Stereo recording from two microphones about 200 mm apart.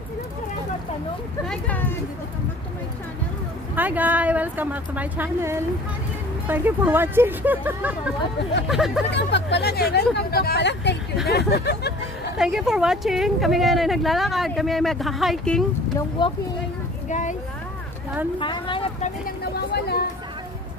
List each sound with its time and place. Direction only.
3.7 s speech: 10° right (ahead or behind)
9.1 s speech: 60° left (ahead or behind)
12.4 s speech: centre (ahead or behind)
16.2 s speech: 20° left (ahead or behind)
17.1 s speech: 40° left (ahead or behind)
18.4 s speech: 25° left (ahead or behind)